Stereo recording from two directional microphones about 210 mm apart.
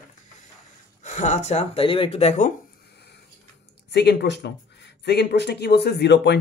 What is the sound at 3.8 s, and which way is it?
Speech, 55° left (ahead or behind).